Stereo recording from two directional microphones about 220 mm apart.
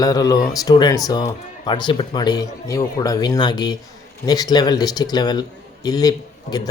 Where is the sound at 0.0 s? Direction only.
15° left (ahead or behind).